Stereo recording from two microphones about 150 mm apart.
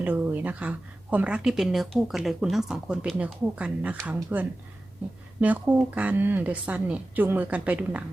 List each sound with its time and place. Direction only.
0.0 s a woman's voice: 10° right (ahead or behind)